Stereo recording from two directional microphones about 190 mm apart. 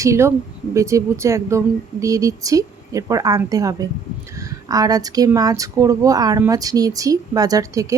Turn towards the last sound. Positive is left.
turn(degrees=-15)  # may be behind; listen again after turning